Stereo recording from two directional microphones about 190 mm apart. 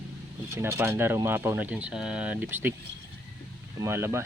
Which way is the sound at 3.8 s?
15° right (ahead or behind).